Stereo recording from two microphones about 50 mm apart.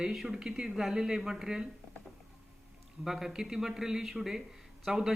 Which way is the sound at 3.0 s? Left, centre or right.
Centre.